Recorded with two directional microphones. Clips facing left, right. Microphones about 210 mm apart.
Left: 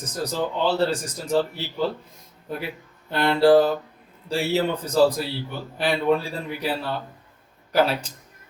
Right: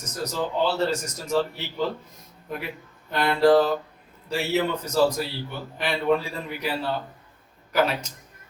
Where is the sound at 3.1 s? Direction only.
30° left (ahead or behind).